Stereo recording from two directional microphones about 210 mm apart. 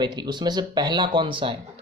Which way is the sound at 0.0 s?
20° right (ahead or behind).